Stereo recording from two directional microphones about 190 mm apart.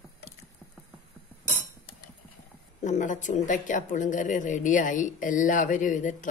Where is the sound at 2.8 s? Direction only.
40° left (ahead or behind).